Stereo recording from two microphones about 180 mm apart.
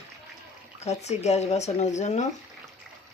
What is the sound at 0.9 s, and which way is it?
Speech, 40° left (ahead or behind).